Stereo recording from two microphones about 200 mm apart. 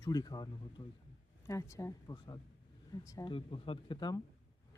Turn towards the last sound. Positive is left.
turn(degrees=20)  # may be behind; listen again after turning